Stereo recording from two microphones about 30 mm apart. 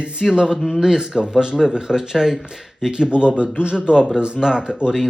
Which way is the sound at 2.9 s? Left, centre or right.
Right.